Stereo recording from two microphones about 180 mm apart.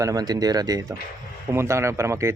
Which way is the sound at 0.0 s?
20° right (ahead or behind).